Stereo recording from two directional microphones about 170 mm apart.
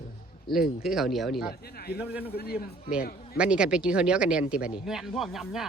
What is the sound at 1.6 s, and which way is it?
Speech, 65° left (ahead or behind).